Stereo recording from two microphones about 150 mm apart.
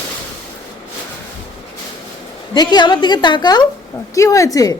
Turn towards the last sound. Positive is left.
turn(degrees=25)  # may be behind; listen again after turning